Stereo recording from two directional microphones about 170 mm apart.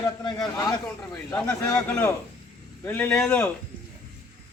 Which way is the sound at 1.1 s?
10° left (ahead or behind).